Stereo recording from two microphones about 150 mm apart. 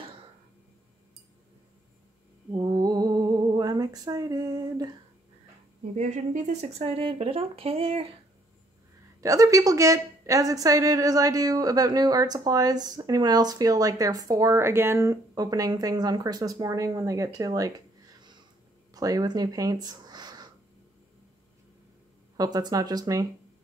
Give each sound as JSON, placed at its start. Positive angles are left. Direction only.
{"t": 2.5, "sound": "a sound", "side_deg": -25}
{"t": 5.9, "sound": "speech", "side_deg": -55}
{"t": 9.2, "sound": "a woman's voice", "side_deg": -20}
{"t": 22.4, "sound": "a woman's voice", "side_deg": -25}